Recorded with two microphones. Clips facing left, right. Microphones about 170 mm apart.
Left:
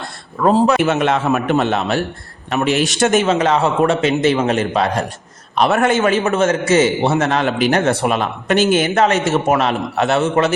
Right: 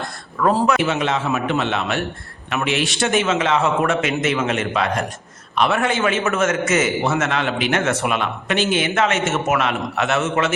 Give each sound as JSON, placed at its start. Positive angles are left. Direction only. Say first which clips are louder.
{"t": 0.3, "sound": "a man's voice", "louder": "left 4 dB", "side_deg": 25}
{"t": 0.8, "sound": "a man's voice", "louder": "left 5 dB", "side_deg": 55}